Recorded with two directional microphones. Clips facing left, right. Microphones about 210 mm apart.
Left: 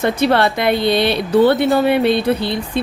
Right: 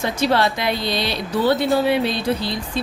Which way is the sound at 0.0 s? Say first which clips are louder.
Left 4 dB; 60° left (ahead or behind).